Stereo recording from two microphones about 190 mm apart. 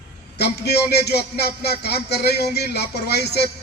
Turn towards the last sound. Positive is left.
turn(degrees=60)  # may be behind; listen again after turning